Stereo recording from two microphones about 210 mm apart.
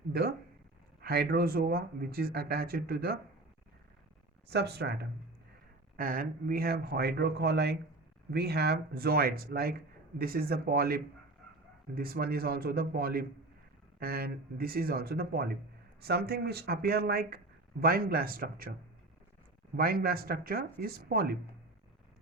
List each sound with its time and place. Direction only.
0.1 s speech: 50° right (ahead or behind)
4.4 s speech: 50° right (ahead or behind)
19.7 s speech: 45° right (ahead or behind)